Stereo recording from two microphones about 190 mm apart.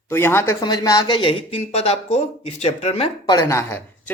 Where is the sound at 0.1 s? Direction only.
10° left (ahead or behind); by 3.1 s 30° left (ahead or behind).